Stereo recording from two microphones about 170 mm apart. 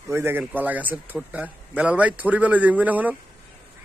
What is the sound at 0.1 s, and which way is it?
Speech, 15° right (ahead or behind).